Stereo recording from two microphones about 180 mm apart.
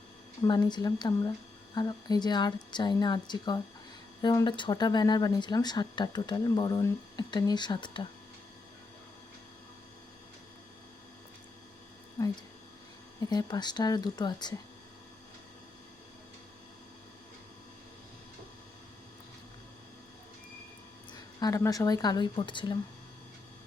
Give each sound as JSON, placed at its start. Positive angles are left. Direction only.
{"t": 0.4, "sound": "speech", "side_deg": 25}
{"t": 13.3, "sound": "speech", "side_deg": 25}
{"t": 21.1, "sound": "speech", "side_deg": 20}